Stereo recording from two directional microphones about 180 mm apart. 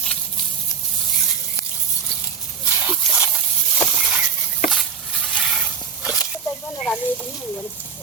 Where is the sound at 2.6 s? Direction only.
10° right (ahead or behind).